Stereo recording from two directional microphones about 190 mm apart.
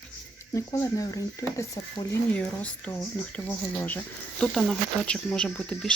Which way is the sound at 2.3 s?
5° left (ahead or behind).